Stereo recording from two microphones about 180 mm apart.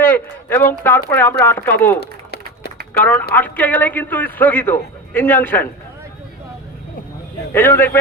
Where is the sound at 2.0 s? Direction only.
65° left (ahead or behind).